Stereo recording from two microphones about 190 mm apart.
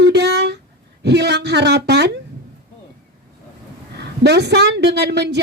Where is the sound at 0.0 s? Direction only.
65° right (ahead or behind).